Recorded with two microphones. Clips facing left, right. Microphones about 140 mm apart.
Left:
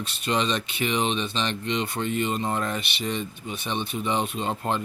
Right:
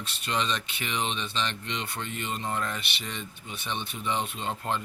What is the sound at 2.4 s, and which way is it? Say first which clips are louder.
Speech: left 4 dB; 30° left (ahead or behind).